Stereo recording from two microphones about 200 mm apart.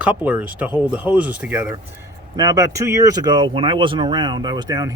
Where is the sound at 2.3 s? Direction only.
20° right (ahead or behind).